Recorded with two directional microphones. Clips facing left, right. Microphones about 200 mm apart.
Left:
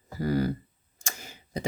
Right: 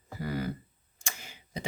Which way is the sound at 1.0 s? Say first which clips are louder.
Left 3 dB; 40° left (ahead or behind).